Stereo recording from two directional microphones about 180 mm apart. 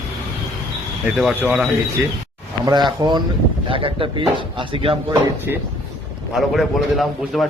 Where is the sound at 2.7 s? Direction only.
25° right (ahead or behind).